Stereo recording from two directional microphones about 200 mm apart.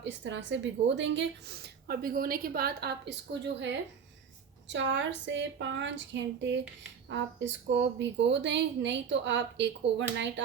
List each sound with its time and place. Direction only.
0.0 s a woman's voice: 65° right (ahead or behind)